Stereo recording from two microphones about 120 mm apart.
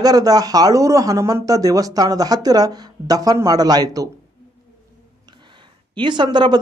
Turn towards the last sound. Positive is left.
turn(degrees=-40)  # may be behind; listen again after turning